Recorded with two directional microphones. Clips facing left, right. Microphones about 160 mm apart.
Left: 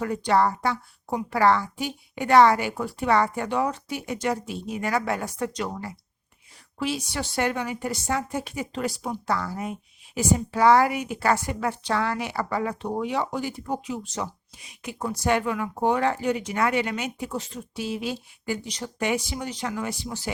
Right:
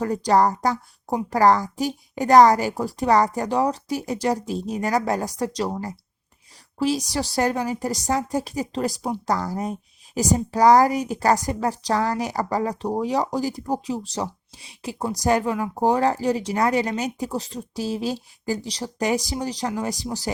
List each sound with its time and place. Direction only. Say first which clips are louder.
0.0 s a woman's voice: right 3 dB; 40° right (ahead or behind)